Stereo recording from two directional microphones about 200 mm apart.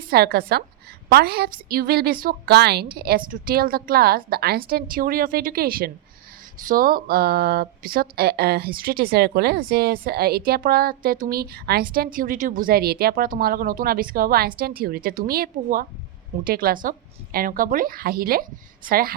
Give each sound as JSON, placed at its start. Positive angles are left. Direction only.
{"t": 0.1, "sound": "speech", "side_deg": -50}